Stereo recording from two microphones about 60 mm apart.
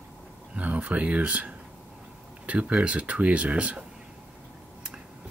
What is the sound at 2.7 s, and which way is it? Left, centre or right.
Speech, centre.